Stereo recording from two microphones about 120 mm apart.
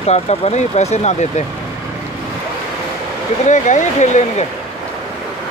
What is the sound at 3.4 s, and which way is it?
Speech, 90° left.